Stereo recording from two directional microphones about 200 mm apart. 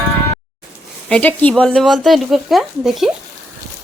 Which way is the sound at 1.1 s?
5° left (ahead or behind).